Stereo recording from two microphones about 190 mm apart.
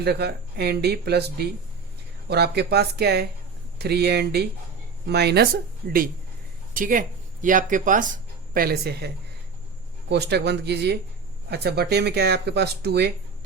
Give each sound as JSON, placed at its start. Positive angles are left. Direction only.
{"t": 0.0, "sound": "speech", "side_deg": -60}
{"t": 6.7, "sound": "speech", "side_deg": -45}